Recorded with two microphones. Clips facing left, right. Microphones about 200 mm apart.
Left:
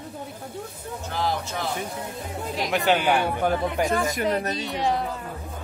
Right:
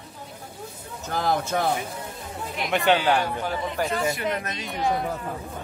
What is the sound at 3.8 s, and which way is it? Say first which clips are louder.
Speech: left 2 dB; 45° left (ahead or behind).